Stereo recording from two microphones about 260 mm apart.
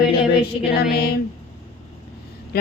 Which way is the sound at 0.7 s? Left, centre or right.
Left.